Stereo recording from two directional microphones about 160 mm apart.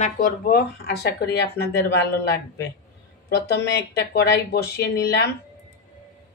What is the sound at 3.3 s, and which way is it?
Speech, 90° left.